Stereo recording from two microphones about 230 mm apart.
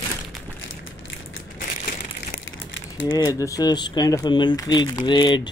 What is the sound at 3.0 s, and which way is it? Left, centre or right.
Speech, centre.